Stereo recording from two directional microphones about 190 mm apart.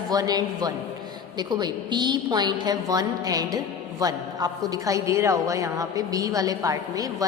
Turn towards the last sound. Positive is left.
turn(degrees=-20)  # may be behind; listen again after turning